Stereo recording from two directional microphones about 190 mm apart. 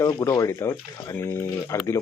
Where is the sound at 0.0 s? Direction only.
15° left (ahead or behind).